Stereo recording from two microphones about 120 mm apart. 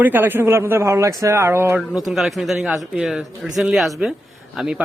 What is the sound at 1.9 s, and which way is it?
A man's voice, centre (ahead or behind).